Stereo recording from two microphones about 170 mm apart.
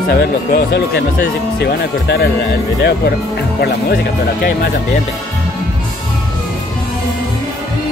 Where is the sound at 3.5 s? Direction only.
65° left (ahead or behind).